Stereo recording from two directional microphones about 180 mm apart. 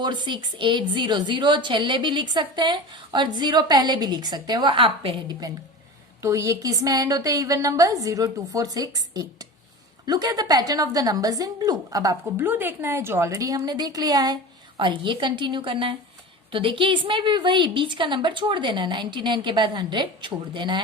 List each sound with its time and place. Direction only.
0.0 s a woman's voice: 25° right (ahead or behind)